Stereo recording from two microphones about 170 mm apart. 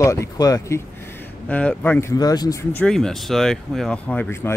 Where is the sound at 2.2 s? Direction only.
20° left (ahead or behind).